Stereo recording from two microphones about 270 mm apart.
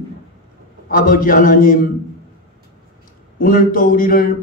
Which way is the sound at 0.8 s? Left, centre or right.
Left.